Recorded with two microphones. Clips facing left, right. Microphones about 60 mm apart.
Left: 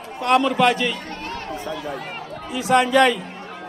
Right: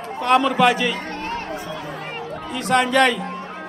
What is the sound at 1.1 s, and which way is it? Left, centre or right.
Chatter, right.